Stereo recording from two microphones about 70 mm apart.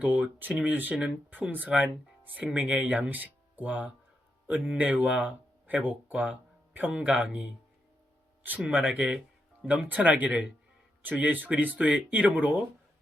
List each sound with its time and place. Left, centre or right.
0.0 s speech: right
8.4 s speech: centre
9.6 s speech: right